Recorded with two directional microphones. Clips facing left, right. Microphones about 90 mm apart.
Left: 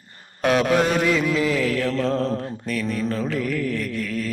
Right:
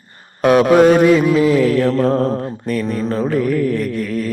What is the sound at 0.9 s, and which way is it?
Mantra, 45° right (ahead or behind).